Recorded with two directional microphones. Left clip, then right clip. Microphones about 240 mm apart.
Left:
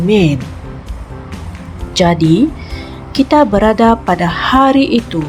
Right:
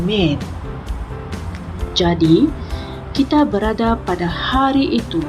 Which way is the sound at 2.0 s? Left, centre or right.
Left.